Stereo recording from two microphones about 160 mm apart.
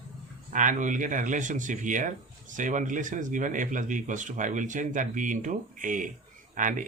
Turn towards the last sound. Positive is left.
turn(degrees=-55)  # may be behind; listen again after turning